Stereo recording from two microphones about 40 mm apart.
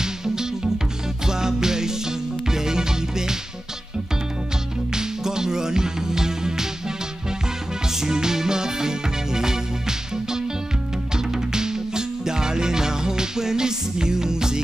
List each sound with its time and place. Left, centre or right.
0.0 s music: centre
4.9 s music: centre
7.9 s music: centre